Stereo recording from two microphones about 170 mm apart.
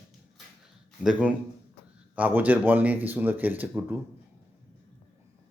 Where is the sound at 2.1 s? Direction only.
10° right (ahead or behind).